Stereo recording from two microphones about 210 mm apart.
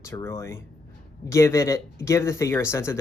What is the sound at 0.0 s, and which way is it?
Speech, 15° left (ahead or behind).